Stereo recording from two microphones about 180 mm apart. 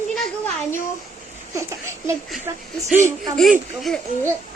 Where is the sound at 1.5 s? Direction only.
15° right (ahead or behind).